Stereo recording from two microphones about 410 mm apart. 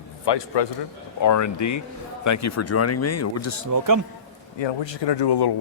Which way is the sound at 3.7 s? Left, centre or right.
Right.